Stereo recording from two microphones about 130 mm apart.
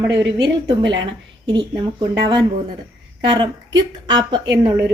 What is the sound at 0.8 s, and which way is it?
Speech, 35° right (ahead or behind).